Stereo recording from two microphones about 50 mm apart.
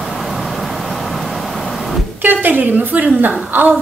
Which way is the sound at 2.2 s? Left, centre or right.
Right.